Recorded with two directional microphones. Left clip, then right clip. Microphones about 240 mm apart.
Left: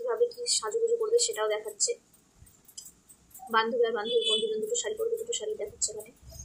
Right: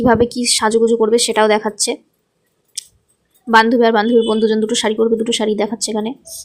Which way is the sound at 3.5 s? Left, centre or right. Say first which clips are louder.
Right 15 dB; right.